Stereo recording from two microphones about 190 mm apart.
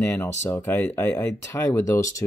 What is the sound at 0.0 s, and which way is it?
Speech, 10° left (ahead or behind).